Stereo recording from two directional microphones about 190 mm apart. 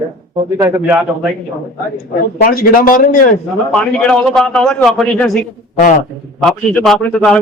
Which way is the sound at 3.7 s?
5° left (ahead or behind).